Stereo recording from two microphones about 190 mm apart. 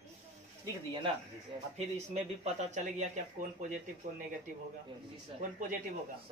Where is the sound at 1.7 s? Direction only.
35° right (ahead or behind).